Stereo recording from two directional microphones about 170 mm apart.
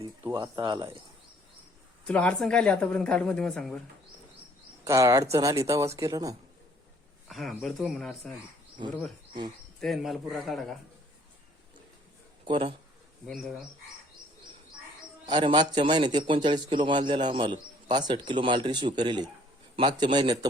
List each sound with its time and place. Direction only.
0.3 s a man's voice: 25° right (ahead or behind)
2.0 s a woman's voice: 5° left (ahead or behind)
4.9 s a man's voice: 20° right (ahead or behind)
7.3 s a woman's voice: centre (ahead or behind)
9.8 s a woman's voice: centre (ahead or behind)
12.5 s a man's voice: 30° right (ahead or behind)
15.3 s a man's voice: 30° right (ahead or behind)